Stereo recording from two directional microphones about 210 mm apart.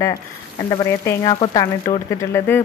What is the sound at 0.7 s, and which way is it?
Speech, 15° left (ahead or behind).